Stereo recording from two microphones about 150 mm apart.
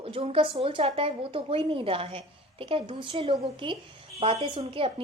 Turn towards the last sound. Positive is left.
turn(degrees=-35)  # may be behind; listen again after turning